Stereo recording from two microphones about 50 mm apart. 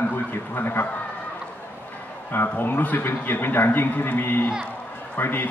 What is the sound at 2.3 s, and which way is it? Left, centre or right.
Speech, left.